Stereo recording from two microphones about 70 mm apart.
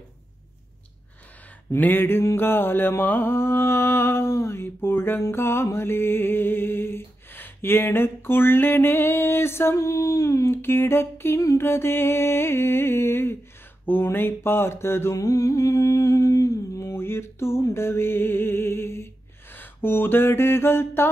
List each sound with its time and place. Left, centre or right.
1.7 s music: left
9.8 s a sound: left
10.5 s music: left
15.1 s humming: left
16.8 s music: left
19.5 s a sound: left